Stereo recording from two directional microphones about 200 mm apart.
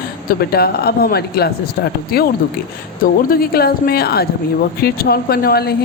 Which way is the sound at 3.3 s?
50° left (ahead or behind).